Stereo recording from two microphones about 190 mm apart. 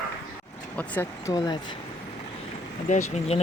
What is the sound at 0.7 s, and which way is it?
Speech, 10° left (ahead or behind).